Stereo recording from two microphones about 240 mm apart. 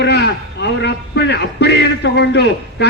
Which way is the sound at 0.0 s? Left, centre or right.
Left.